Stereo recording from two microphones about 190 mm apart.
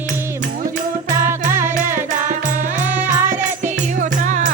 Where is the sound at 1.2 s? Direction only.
15° right (ahead or behind).